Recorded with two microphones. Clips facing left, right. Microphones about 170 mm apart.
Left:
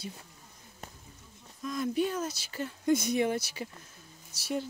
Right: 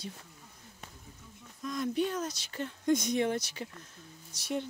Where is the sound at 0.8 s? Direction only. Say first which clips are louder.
Left 4 dB; 45° left (ahead or behind).